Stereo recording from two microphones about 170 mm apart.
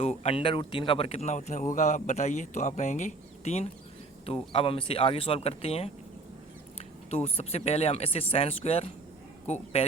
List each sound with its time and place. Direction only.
0.0 s speech: 40° left (ahead or behind)